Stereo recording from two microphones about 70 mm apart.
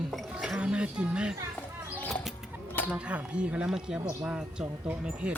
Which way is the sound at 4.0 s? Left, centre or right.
Right.